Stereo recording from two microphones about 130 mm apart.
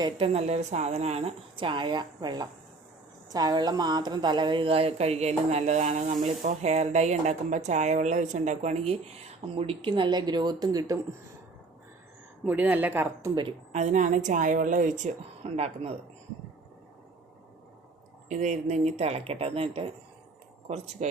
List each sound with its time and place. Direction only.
0.0 s a woman's voice: 45° right (ahead or behind); by 10.9 s 30° right (ahead or behind)
12.5 s speech: 10° right (ahead or behind)
13.7 s a woman's voice: 70° right (ahead or behind); by 16.0 s 50° right (ahead or behind)
18.3 s a woman's voice: 65° right (ahead or behind)